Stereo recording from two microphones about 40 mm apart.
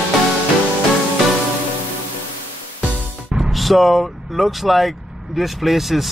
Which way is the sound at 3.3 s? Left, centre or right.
Centre.